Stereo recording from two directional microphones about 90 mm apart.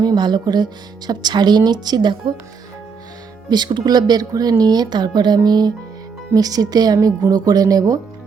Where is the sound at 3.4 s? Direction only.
55° right (ahead or behind).